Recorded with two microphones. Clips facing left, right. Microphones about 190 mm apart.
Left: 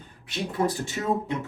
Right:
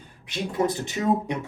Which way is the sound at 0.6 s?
20° right (ahead or behind).